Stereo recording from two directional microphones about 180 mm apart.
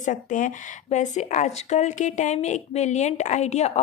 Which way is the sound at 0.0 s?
45° left (ahead or behind).